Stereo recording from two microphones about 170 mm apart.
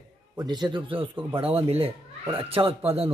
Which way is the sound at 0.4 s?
25° right (ahead or behind).